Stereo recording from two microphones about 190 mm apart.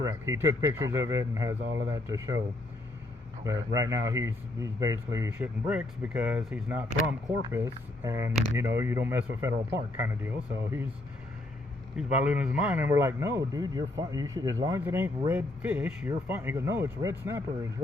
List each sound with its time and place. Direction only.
0.0 s a man's voice: 15° right (ahead or behind)
3.4 s a man's voice: 20° right (ahead or behind)
11.9 s a man's voice: 5° right (ahead or behind)